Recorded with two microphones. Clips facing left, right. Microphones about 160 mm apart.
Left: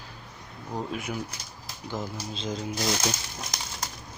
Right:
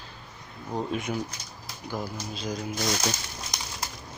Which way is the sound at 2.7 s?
5° left (ahead or behind).